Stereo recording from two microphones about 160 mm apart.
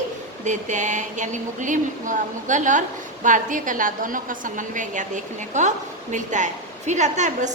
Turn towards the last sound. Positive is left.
turn(degrees=-50)  # may be behind; listen again after turning